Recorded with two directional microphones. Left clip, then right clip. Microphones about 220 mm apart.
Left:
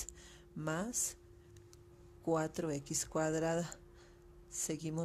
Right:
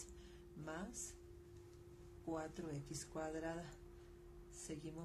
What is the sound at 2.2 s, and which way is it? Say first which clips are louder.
Speech: left 11 dB; 45° left (ahead or behind).